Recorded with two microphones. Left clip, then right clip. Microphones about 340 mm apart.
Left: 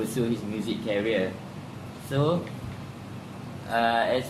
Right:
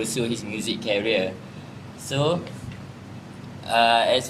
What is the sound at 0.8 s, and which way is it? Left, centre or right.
Speech, right.